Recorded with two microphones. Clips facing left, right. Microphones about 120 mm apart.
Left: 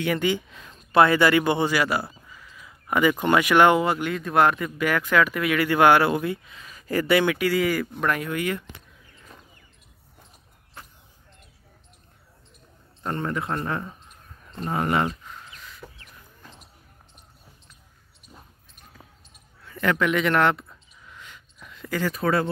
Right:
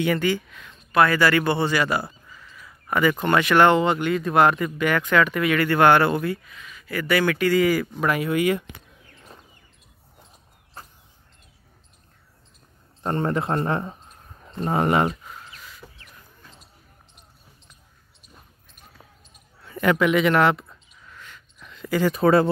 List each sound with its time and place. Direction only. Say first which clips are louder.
0.1 s speech: right 1 dB; 20° left (ahead or behind)
0.5 s speech: left 1 dB; 30° left (ahead or behind); by 6.2 s 10° left (ahead or behind)
6.2 s speech: right 1 dB; 20° left (ahead or behind)
7.1 s speech: even; 20° left (ahead or behind)
7.3 s speech: right 3 dB; 5° left (ahead or behind); by 8.6 s 10° right (ahead or behind)
10.8 s a sound: right 2 dB; 40° right (ahead or behind)
13.0 s speech: right 4 dB; 30° right (ahead or behind)
14.9 s speech: right 2 dB; 25° right (ahead or behind)
19.7 s a man's voice: right 3 dB; 15° right (ahead or behind)
20.1 s speech: right 2 dB; 5° right (ahead or behind)
21.1 s a sound: even; 15° left (ahead or behind)
21.5 s a sound: right 3 dB; centre (ahead or behind)
21.9 s speech: right 5 dB; 15° right (ahead or behind)
22.2 s speech: right 6 dB; 30° right (ahead or behind)